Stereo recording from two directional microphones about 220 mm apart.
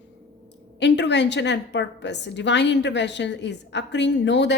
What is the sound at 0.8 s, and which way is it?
A woman's voice, 50° left (ahead or behind).